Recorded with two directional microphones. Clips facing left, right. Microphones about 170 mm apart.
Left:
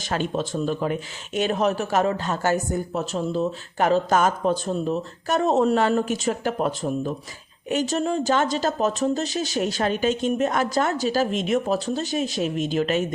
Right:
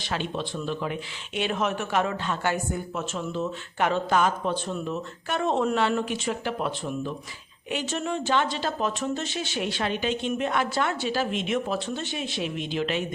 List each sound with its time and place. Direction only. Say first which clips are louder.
0.0 s speech: left 5 dB; 45° left (ahead or behind)